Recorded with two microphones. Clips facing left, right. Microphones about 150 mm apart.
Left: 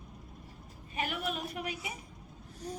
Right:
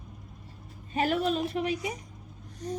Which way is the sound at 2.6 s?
10° left (ahead or behind).